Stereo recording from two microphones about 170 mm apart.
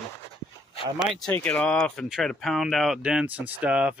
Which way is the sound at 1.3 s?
10° left (ahead or behind).